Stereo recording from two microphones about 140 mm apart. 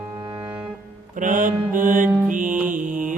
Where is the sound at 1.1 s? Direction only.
70° right (ahead or behind).